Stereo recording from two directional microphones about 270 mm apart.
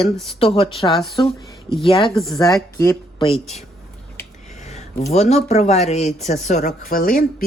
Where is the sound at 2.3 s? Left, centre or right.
Centre.